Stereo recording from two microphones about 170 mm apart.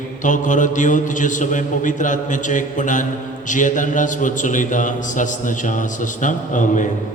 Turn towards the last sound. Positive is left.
turn(degrees=50)  # may be behind; listen again after turning